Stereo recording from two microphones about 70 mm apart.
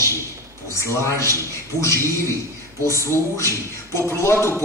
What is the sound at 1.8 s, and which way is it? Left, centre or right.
A man's voice, left.